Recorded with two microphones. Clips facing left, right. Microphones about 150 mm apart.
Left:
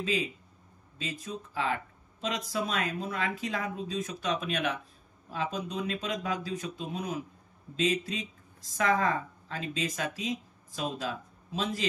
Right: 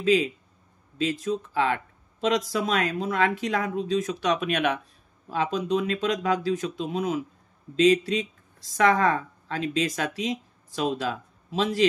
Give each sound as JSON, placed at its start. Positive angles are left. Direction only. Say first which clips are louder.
{"t": 0.9, "sound": "speech", "louder": "right 11 dB", "side_deg": -90}
{"t": 5.3, "sound": "a woman's voice", "louder": "right 8 dB", "side_deg": -90}